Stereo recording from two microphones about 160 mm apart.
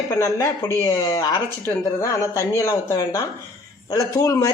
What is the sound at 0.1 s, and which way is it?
Speech, 20° left (ahead or behind).